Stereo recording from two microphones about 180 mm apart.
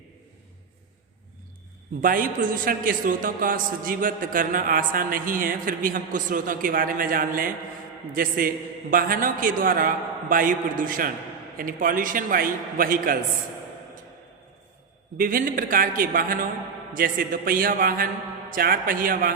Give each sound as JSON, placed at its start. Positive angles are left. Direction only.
{"t": 2.0, "sound": "a man's voice", "side_deg": -50}
{"t": 15.2, "sound": "a man's voice", "side_deg": -50}